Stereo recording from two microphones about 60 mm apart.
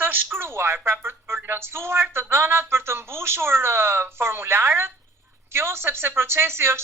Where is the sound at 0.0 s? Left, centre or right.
Right.